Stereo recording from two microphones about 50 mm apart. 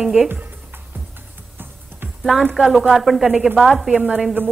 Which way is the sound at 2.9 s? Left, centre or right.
Centre.